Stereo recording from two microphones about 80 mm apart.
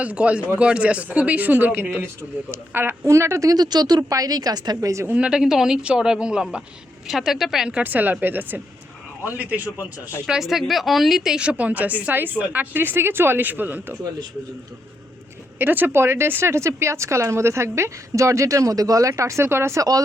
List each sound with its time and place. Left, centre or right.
0.0 s a woman's voice: centre; by 3.5 s right
3.5 s speech: right
5.1 s a woman's voice: centre
9.7 s speech: left
10.2 s a woman's voice: centre; by 13.9 s right
15.5 s speech: right
19.8 s speech: right